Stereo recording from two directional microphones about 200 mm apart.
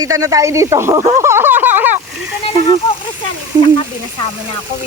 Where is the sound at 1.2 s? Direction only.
10° right (ahead or behind).